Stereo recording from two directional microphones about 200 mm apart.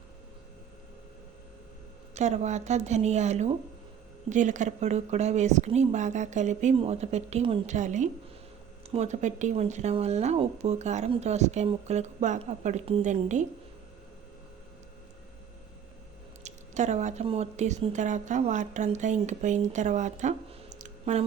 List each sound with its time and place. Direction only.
2.1 s speech: 35° right (ahead or behind)
16.4 s speech: 35° right (ahead or behind)